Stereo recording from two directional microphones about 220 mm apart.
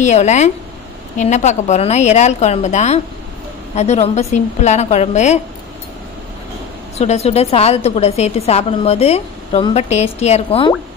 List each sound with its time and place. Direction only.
0.0 s a woman's voice: 30° left (ahead or behind)
7.0 s a woman's voice: 30° left (ahead or behind)